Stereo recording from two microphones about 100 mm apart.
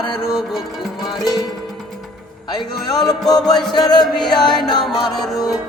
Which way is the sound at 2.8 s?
40° left (ahead or behind).